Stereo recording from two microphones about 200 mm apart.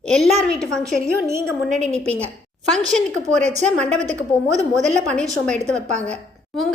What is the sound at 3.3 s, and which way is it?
Speech, 35° right (ahead or behind).